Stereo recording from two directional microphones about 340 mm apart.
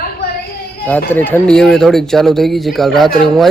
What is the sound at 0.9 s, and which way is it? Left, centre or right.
Speech, centre.